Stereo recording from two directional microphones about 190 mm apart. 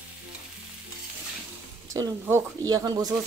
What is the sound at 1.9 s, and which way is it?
Speech, 15° right (ahead or behind).